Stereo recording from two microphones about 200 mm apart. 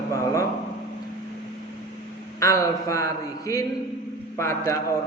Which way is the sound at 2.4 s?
15° left (ahead or behind).